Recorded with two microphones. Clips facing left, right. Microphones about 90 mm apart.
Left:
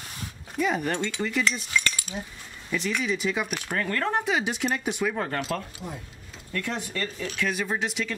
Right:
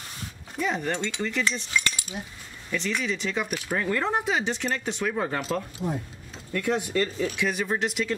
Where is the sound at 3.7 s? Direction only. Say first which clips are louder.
Right 1 dB; 10° right (ahead or behind).